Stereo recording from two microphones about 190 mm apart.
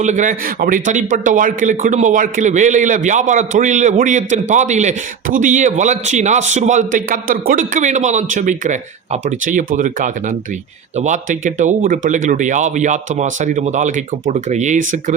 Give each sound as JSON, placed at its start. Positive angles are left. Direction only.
{"t": 0.0, "sound": "a man's voice", "side_deg": -40}